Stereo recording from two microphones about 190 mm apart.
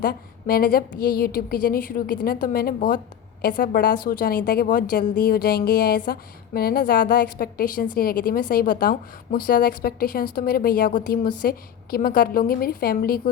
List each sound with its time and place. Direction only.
0.0 s a woman's voice: 50° left (ahead or behind)